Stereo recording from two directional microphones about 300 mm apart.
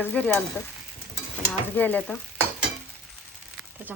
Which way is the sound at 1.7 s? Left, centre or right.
Centre.